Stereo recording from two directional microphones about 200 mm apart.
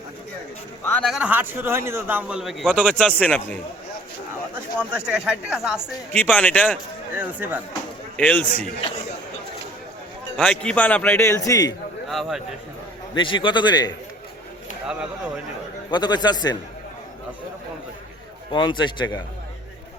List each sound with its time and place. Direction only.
0.9 s a man's voice: centre (ahead or behind)
4.5 s a man's voice: 5° right (ahead or behind)
7.1 s speech: 10° right (ahead or behind)
8.1 s a man's voice: 5° left (ahead or behind)
10.3 s a man's voice: 5° left (ahead or behind)
12.0 s a man's voice: centre (ahead or behind)
13.1 s a man's voice: 25° left (ahead or behind)
15.9 s a man's voice: 20° left (ahead or behind)
18.5 s a man's voice: 25° left (ahead or behind)